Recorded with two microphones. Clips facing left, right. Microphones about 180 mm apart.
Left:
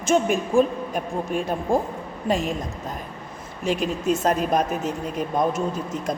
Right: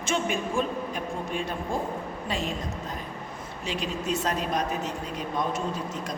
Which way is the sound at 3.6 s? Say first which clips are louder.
Left 7 dB; 50° left (ahead or behind).